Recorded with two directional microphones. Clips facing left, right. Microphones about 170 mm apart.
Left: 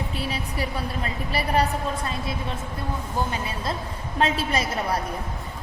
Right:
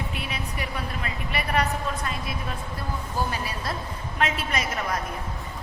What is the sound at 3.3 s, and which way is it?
A woman's voice, 25° left (ahead or behind).